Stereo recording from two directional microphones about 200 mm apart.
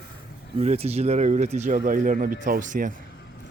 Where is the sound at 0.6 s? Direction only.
30° right (ahead or behind).